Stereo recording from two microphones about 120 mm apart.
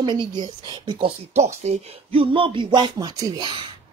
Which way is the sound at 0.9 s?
75° right (ahead or behind).